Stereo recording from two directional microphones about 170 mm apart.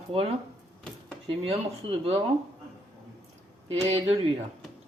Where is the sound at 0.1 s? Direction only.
35° right (ahead or behind).